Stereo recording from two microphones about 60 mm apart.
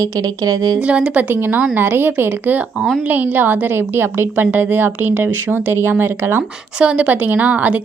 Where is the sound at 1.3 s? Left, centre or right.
Right.